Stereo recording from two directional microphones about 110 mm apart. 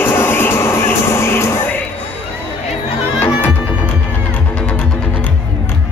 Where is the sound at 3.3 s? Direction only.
15° left (ahead or behind).